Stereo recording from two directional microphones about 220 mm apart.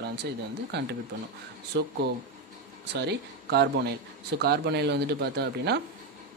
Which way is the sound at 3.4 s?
50° right (ahead or behind).